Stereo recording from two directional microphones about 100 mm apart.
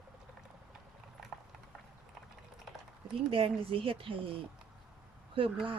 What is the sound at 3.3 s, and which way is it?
Speech, 65° right (ahead or behind).